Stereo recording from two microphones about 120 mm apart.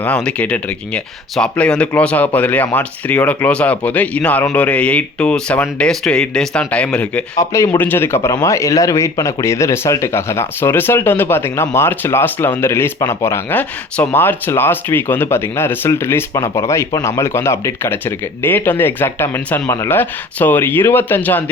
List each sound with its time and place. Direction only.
0.0 s speech: 10° left (ahead or behind)
7.3 s speech: 25° left (ahead or behind)
19.6 s speech: 30° left (ahead or behind)
19.9 s speech: 15° left (ahead or behind)